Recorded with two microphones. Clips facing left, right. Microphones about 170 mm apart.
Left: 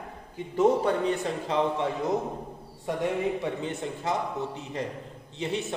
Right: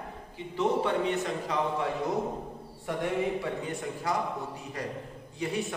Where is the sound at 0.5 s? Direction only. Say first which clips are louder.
Left 4 dB; 40° left (ahead or behind).